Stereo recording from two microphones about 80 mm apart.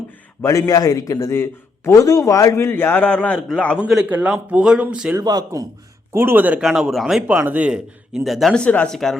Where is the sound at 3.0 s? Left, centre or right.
Centre.